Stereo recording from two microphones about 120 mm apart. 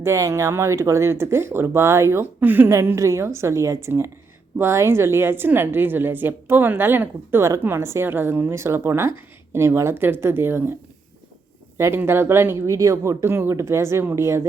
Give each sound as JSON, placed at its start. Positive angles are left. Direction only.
{"t": 0.0, "sound": "a woman's voice", "side_deg": -25}
{"t": 11.8, "sound": "a woman's voice", "side_deg": -20}